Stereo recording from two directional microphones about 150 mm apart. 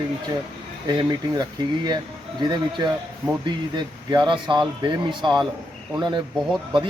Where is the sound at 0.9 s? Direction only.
25° right (ahead or behind).